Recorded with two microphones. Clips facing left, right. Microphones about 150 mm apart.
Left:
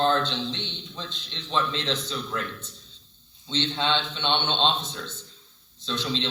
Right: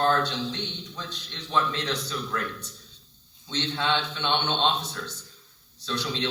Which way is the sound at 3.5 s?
20° left (ahead or behind).